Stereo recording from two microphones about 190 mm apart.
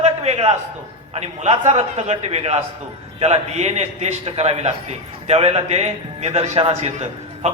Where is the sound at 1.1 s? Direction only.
35° right (ahead or behind).